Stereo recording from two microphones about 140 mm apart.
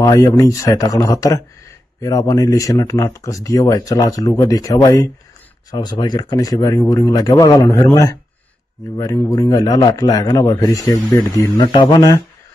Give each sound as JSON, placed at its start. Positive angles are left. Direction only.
{"t": 0.0, "sound": "speech", "side_deg": 25}